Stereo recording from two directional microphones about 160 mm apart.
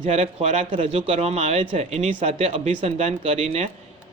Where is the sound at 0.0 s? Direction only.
45° right (ahead or behind).